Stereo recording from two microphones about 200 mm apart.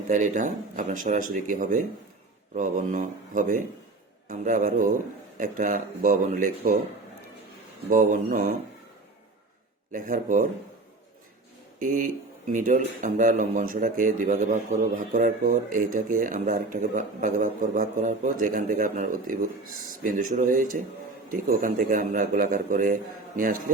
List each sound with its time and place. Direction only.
0.1 s speech: 40° right (ahead or behind)
7.9 s speech: 40° right (ahead or behind)
9.9 s speech: 40° right (ahead or behind)
12.5 s a man's voice: 40° right (ahead or behind)